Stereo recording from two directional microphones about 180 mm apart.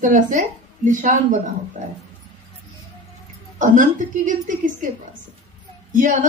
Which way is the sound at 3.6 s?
45° right (ahead or behind).